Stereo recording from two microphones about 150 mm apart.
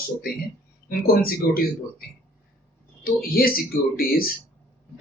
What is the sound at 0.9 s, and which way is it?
A man's voice, 80° left.